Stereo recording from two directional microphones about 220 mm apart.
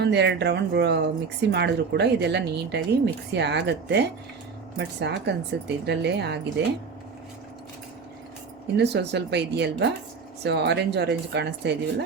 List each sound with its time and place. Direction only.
0.0 s speech: 50° right (ahead or behind)
8.6 s speech: 50° right (ahead or behind)